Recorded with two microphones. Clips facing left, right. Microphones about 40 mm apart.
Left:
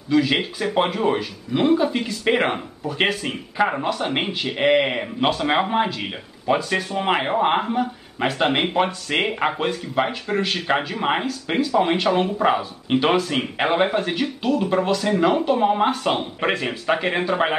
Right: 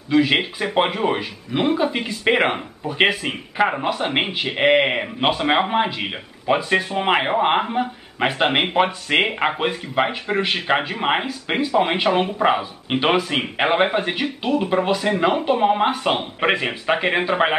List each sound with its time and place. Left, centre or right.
0.1 s speech: right